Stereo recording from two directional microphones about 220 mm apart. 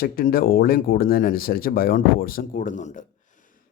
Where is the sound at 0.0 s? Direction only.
40° left (ahead or behind).